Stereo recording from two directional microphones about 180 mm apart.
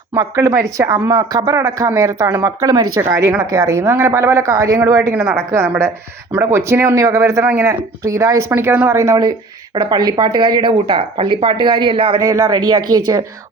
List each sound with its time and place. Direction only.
0.1 s speech: 20° right (ahead or behind)
12.2 s speech: 20° right (ahead or behind)